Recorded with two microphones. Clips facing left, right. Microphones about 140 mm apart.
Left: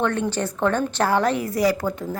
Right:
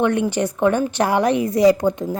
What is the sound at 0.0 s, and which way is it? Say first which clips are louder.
Speech: right 4 dB; 15° right (ahead or behind).